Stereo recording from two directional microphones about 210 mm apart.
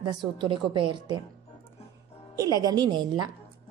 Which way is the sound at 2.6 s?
20° right (ahead or behind).